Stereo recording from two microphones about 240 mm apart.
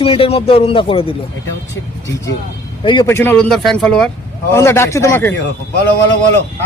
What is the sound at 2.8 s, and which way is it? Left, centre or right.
A man's voice, centre.